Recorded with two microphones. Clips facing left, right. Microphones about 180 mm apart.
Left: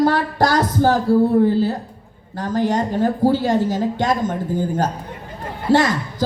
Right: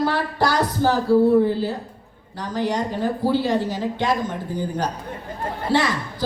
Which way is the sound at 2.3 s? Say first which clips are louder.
Left 4 dB; 50° left (ahead or behind).